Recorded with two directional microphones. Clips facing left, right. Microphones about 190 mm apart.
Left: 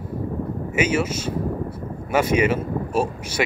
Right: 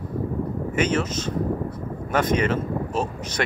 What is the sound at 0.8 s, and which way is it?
Speech, 10° left (ahead or behind).